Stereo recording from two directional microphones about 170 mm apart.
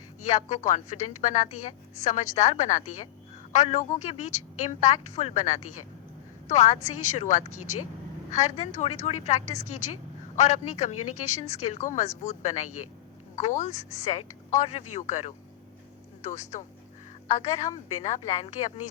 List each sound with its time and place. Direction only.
0.3 s a woman's voice: 40° left (ahead or behind)